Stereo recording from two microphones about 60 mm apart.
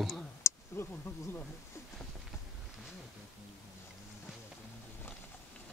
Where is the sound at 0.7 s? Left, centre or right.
Left.